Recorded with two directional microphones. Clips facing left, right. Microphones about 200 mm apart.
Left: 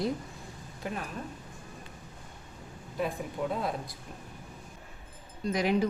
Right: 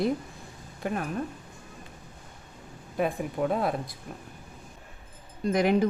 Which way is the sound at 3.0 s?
60° right (ahead or behind).